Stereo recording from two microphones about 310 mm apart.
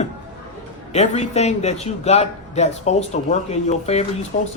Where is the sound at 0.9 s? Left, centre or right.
Left.